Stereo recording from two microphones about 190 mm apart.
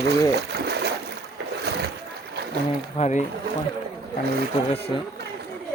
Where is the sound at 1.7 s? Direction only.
60° right (ahead or behind).